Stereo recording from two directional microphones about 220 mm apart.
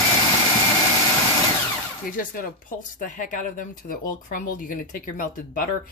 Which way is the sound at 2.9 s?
35° left (ahead or behind).